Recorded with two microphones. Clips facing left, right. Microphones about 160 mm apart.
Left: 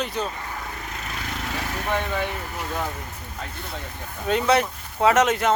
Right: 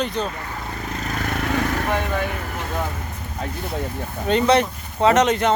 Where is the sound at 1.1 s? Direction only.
55° right (ahead or behind).